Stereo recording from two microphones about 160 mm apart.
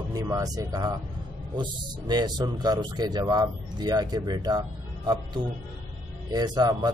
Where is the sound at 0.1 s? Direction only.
20° right (ahead or behind).